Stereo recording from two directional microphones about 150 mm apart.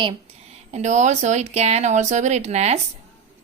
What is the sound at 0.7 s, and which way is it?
Speech, 50° right (ahead or behind).